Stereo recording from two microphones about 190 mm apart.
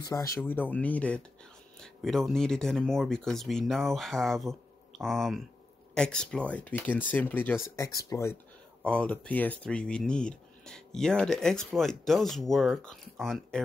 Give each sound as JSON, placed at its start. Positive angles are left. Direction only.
{"t": 0.0, "sound": "speech", "side_deg": 15}
{"t": 8.8, "sound": "speech", "side_deg": 5}